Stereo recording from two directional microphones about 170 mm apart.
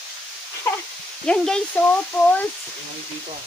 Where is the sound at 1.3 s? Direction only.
5° left (ahead or behind).